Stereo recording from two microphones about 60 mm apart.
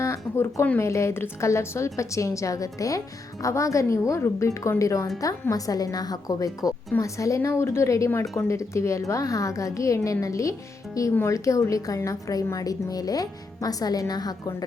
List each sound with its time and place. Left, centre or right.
0.0 s a sound: left
0.8 s a woman's voice: left
3.4 s a woman's voice: left
7.0 s a woman's voice: left
12.5 s speech: left